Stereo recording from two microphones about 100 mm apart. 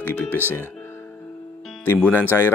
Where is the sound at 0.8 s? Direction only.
20° left (ahead or behind).